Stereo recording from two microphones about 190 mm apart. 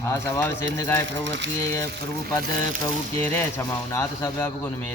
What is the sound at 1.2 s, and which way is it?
Ratchet, 75° right (ahead or behind).